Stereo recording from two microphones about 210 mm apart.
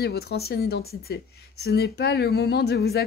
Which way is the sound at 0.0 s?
50° left (ahead or behind).